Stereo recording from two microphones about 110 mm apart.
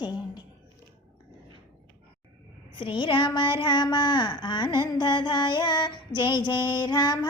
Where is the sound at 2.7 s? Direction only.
45° left (ahead or behind).